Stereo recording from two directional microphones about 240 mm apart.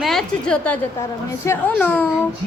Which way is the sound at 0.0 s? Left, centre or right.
Centre.